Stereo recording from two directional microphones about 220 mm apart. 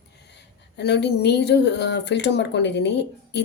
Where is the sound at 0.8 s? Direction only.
50° left (ahead or behind).